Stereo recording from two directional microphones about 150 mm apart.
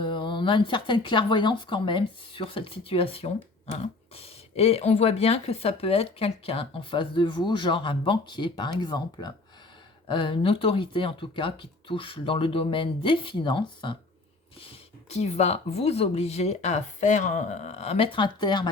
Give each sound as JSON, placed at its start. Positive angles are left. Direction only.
{"t": 0.0, "sound": "speech", "side_deg": 35}